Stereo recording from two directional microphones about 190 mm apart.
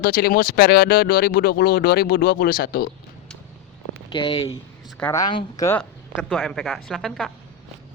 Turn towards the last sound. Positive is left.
turn(degrees=0)  # may be behind; listen again after turning